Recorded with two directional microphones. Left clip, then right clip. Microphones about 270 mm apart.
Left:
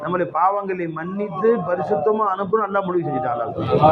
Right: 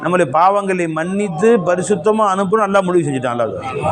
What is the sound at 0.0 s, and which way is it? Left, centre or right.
A man's voice, right.